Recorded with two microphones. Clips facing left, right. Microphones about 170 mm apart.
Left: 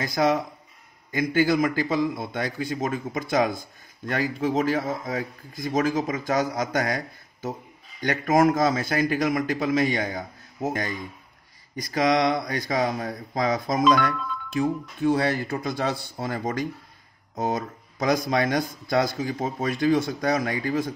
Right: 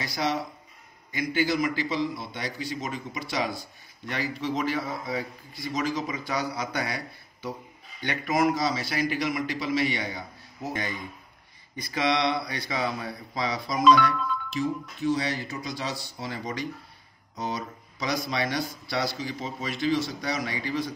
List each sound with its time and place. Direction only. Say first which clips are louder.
0.0 s speech: left 6 dB; 50° left (ahead or behind)